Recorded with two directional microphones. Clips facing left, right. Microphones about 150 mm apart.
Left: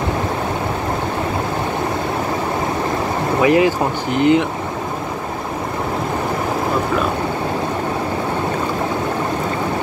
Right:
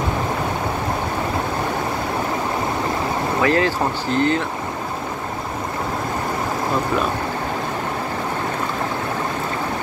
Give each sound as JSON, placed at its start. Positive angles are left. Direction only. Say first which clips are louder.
{"t": 3.3, "sound": "speech", "louder": "left 5 dB", "side_deg": 15}